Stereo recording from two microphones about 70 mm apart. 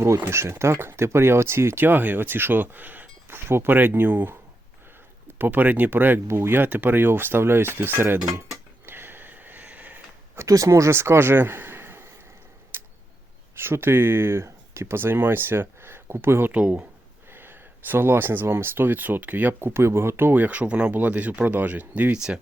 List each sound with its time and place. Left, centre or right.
0.0 s speech: right
5.4 s speech: right
8.9 s sniff: right
10.3 s speech: right
12.7 s tick-tock: right
13.6 s speech: right
16.5 s speech: centre
17.3 s speech: right